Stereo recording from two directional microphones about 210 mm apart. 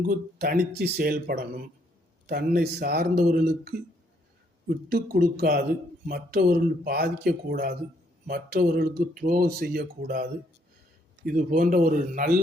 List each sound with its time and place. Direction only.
0.0 s speech: 45° right (ahead or behind)
4.9 s speech: 45° right (ahead or behind)
11.3 s speech: 40° right (ahead or behind)